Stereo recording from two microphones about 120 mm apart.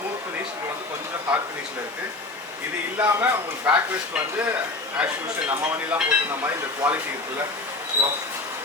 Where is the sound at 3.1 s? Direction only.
25° right (ahead or behind).